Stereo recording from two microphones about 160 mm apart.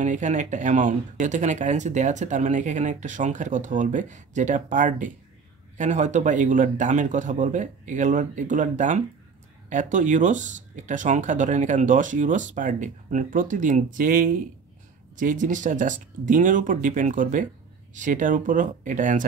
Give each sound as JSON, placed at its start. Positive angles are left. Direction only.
{"t": 0.0, "sound": "speech", "side_deg": -50}